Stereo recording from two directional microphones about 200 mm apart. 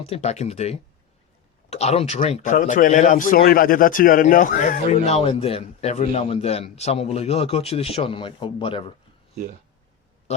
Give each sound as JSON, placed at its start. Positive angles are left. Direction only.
{"t": 0.0, "sound": "speech", "side_deg": 30}